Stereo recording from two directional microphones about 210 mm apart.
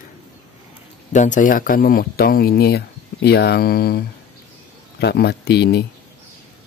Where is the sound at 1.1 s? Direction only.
35° left (ahead or behind).